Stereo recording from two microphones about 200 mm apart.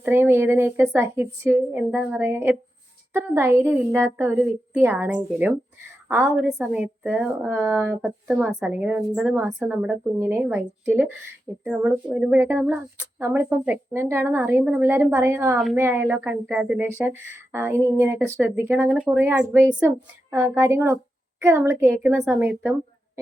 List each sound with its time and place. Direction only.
0.0 s a woman's voice: 10° right (ahead or behind)
8.3 s a woman's voice: centre (ahead or behind)